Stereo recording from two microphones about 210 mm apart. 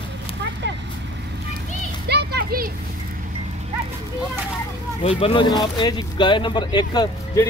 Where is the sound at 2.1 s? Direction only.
50° right (ahead or behind).